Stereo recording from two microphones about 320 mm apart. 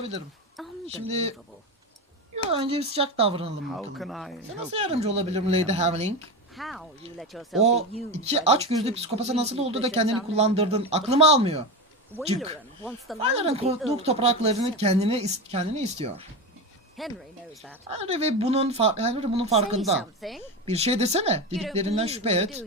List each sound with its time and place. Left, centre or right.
0.9 s speech: centre
2.5 s speech: centre
3.8 s speech: centre
4.7 s speech: centre
6.6 s speech: centre
7.6 s speech: centre
13.1 s speech: centre
17.0 s speech: centre
17.8 s speech: centre
20.2 s speech: centre
20.7 s speech: centre